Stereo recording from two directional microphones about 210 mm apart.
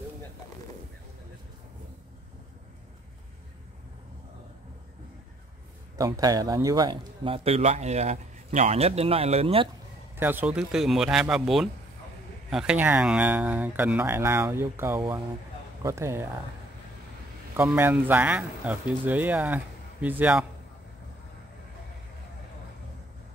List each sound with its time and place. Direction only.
5.9 s speech: 15° right (ahead or behind)
10.1 s speech: 10° right (ahead or behind)
17.6 s speech: 10° right (ahead or behind)